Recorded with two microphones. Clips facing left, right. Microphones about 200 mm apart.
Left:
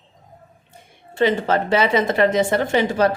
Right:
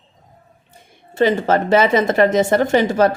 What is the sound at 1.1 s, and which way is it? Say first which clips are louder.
A woman's voice: right 3 dB; 40° right (ahead or behind).